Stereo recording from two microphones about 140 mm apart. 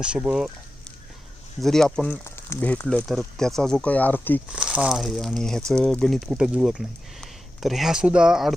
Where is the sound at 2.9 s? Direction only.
Centre (ahead or behind).